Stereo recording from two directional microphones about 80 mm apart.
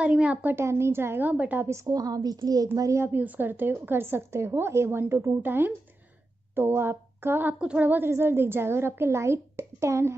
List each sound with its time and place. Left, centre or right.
0.0 s speech: centre
0.6 s a child's voice: right; by 1.7 s centre
1.7 s a woman's voice: right
3.1 s a child's voice: right